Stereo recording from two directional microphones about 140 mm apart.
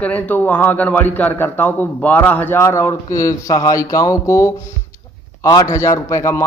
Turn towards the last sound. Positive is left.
turn(degrees=20)  # may be behind; listen again after turning